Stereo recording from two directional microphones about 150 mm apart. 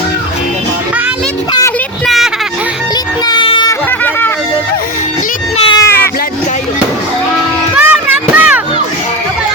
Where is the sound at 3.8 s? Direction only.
15° left (ahead or behind).